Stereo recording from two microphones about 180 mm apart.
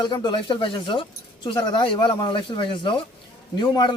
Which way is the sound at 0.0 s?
25° left (ahead or behind).